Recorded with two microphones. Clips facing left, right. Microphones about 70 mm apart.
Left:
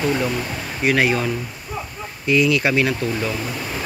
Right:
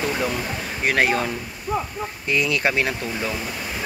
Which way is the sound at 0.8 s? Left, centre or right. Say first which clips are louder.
Left 2 dB; right.